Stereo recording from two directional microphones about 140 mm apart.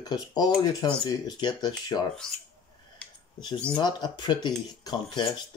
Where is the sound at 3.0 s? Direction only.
5° left (ahead or behind).